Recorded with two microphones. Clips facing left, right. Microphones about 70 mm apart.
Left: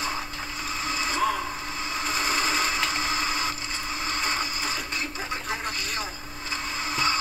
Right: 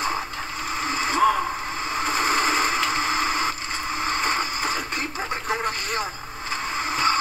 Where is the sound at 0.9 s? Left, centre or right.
Right.